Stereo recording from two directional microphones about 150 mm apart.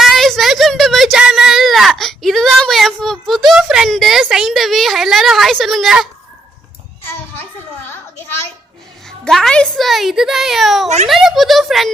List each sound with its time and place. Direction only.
0.0 s a sound: centre (ahead or behind)
9.0 s a child's voice: centre (ahead or behind)
10.8 s a child's voice: 50° right (ahead or behind)
11.1 s a child's voice: centre (ahead or behind)